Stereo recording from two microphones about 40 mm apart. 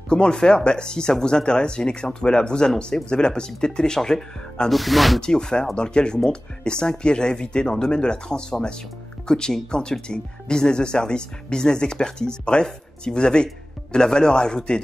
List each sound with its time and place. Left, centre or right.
0.1 s speech: left
4.6 s speech: centre
5.2 s speech: centre